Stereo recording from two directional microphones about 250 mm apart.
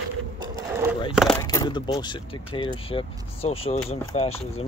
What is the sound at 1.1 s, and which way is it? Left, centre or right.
Speech, centre.